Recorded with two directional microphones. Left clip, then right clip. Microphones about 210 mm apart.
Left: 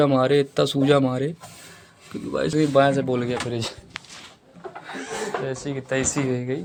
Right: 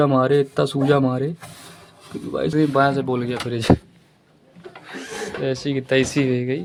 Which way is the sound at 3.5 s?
35° right (ahead or behind).